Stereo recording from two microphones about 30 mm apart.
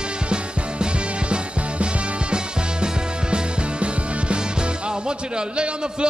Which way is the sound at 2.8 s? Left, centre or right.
Right.